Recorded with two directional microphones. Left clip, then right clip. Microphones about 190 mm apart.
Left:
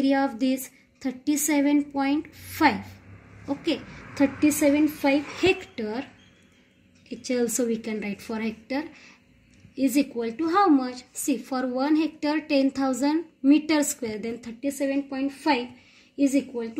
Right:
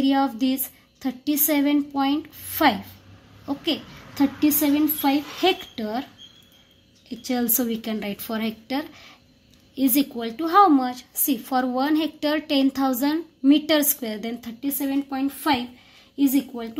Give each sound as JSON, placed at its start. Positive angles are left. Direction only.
{"t": 0.0, "sound": "a woman's voice", "side_deg": -45}
{"t": 7.1, "sound": "a woman's voice", "side_deg": -45}